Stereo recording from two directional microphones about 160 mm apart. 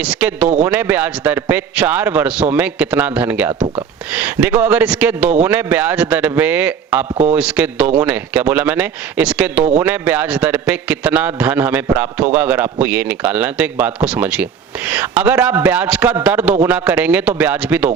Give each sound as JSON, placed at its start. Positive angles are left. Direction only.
{"t": 0.0, "sound": "a man's voice", "side_deg": -10}